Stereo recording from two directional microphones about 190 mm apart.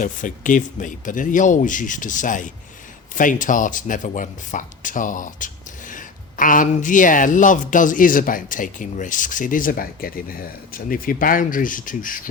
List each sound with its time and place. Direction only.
0.0 s speech: 45° left (ahead or behind)